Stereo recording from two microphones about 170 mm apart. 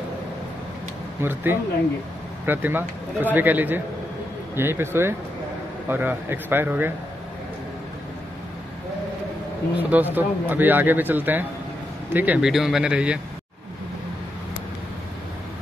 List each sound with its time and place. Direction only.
1.2 s a man's voice: 10° right (ahead or behind)
9.8 s a man's voice: 10° right (ahead or behind)